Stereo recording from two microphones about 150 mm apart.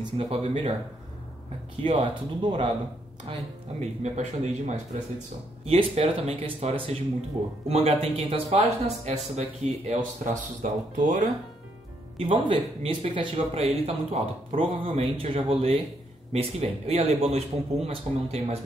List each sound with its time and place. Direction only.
0.2 s speech: 45° right (ahead or behind)
1.8 s speech: 35° right (ahead or behind)
3.8 s speech: 50° right (ahead or behind)
12.2 s speech: 35° right (ahead or behind)